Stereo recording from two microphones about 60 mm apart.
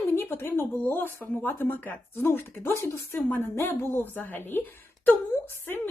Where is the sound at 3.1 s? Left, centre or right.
Left.